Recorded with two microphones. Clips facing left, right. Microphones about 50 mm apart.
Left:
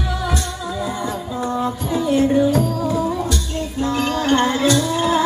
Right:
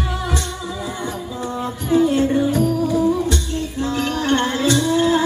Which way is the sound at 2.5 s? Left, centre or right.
Left.